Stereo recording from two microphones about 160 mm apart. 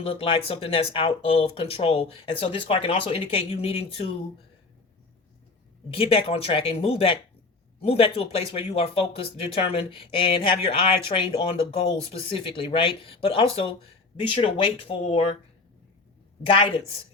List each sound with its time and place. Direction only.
0.0 s speech: 35° left (ahead or behind)
5.9 s speech: 35° left (ahead or behind)